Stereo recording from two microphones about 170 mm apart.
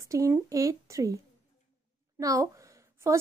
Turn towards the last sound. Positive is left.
turn(degrees=-15)  # may be behind; listen again after turning